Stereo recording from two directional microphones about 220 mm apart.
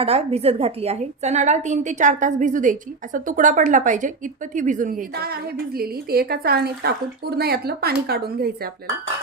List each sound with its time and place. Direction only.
0.0 s a woman's voice: 25° right (ahead or behind); by 8.7 s 45° right (ahead or behind)